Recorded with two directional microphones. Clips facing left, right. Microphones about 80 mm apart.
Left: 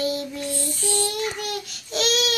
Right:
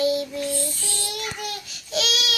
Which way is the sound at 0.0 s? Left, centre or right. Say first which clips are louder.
Right 3 dB; left.